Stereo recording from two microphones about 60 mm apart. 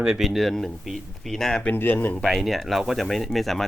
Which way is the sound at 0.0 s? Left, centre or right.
Centre.